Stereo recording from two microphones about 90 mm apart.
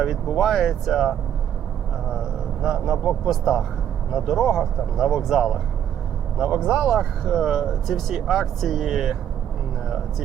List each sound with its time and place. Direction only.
0.0 s speech: centre (ahead or behind)
2.6 s a man's voice: 10° right (ahead or behind)